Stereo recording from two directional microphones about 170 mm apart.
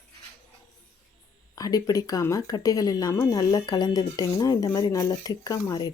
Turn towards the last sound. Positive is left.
turn(degrees=20)  # may be behind; listen again after turning